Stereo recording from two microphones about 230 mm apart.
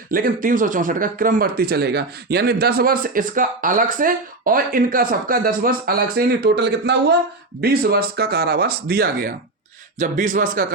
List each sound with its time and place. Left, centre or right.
0.1 s speech: right